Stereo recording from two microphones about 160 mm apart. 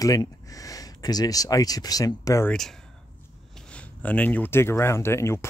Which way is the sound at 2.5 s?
Centre (ahead or behind).